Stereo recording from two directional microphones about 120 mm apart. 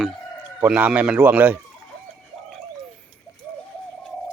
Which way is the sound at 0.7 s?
10° right (ahead or behind).